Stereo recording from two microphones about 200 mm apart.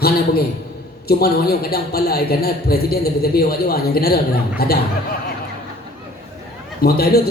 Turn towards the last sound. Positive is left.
turn(degrees=50)  # may be behind; listen again after turning